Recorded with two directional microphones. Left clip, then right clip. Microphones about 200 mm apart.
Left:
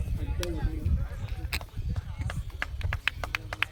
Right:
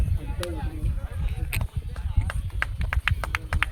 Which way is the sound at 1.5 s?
10° left (ahead or behind).